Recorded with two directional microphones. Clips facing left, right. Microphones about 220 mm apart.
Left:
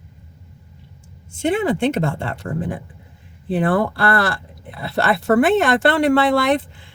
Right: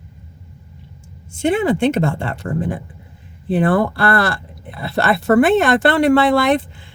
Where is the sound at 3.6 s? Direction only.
60° right (ahead or behind).